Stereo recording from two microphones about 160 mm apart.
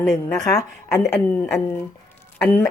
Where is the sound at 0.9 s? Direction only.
15° left (ahead or behind).